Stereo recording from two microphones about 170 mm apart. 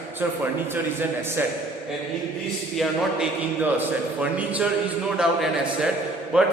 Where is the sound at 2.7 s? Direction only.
Centre (ahead or behind).